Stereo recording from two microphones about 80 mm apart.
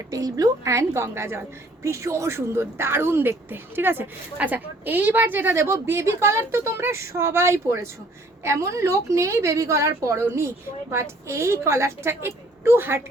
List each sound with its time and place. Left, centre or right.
0.1 s a woman's voice: right